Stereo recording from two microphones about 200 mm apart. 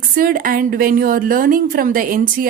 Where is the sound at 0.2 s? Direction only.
45° right (ahead or behind).